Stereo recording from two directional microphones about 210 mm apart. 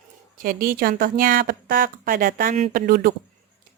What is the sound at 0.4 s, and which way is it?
A woman's voice, 45° right (ahead or behind).